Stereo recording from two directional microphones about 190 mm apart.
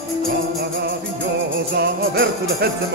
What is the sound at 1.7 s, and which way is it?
Jingle bell, 60° right (ahead or behind).